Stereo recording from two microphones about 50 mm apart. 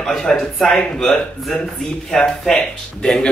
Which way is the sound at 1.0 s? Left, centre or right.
Centre.